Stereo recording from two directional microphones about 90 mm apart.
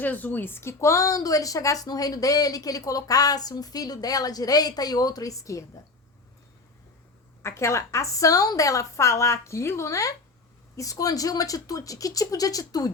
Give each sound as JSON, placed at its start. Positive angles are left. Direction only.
{"t": 0.0, "sound": "speech", "side_deg": 20}
{"t": 7.4, "sound": "speech", "side_deg": 30}